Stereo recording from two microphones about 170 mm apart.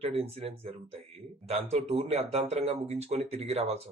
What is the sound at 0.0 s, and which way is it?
Speech, 35° right (ahead or behind).